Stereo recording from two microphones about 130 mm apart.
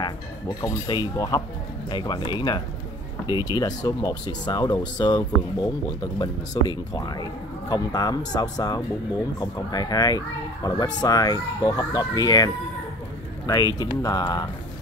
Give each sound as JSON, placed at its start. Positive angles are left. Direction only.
{"t": 0.0, "sound": "speech", "side_deg": 30}
{"t": 13.5, "sound": "speech", "side_deg": 30}